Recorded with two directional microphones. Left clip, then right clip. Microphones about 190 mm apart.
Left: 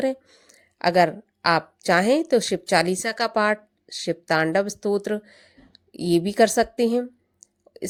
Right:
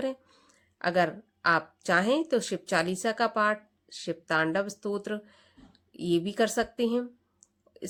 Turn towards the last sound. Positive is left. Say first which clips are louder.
# left 8 dB
turn(degrees=30)  # may be behind; listen again after turning